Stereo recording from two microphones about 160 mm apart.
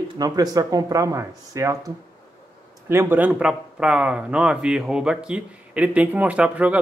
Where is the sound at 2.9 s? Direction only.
15° right (ahead or behind).